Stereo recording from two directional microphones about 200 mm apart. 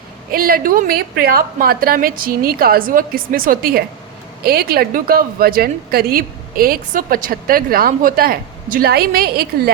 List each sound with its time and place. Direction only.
0.3 s a woman's voice: 45° right (ahead or behind)